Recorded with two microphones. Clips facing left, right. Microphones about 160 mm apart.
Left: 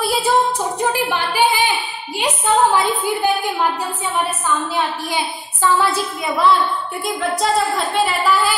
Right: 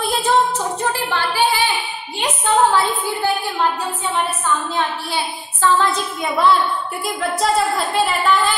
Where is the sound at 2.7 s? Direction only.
15° left (ahead or behind).